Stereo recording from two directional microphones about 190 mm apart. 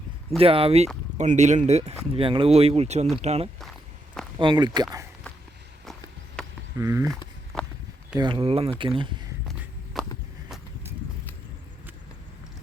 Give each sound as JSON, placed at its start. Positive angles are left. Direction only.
{"t": 0.3, "sound": "speech", "side_deg": -30}
{"t": 5.8, "sound": "a sound", "side_deg": 0}
{"t": 6.7, "sound": "speech", "side_deg": -15}
{"t": 7.5, "sound": "walk", "side_deg": 5}
{"t": 8.1, "sound": "speech", "side_deg": -25}
{"t": 9.5, "sound": "a sound", "side_deg": 0}